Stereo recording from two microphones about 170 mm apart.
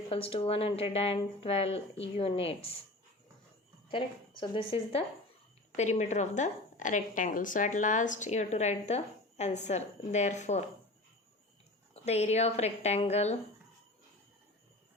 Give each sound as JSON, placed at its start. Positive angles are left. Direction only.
{"t": 0.1, "sound": "a woman's voice", "side_deg": 35}
{"t": 3.9, "sound": "a woman's voice", "side_deg": 30}
{"t": 12.0, "sound": "a woman's voice", "side_deg": 40}